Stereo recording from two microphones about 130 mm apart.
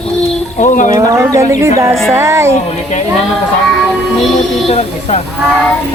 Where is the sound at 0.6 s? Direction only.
80° left.